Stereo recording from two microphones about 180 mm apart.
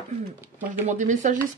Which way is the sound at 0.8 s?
40° right (ahead or behind).